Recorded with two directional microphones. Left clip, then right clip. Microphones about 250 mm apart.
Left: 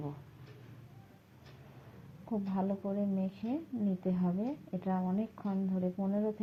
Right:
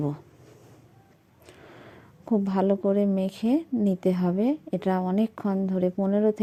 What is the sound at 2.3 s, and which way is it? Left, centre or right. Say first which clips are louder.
A woman's voice: right 13 dB; right.